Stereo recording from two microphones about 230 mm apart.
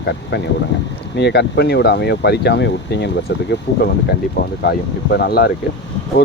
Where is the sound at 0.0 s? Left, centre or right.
Left.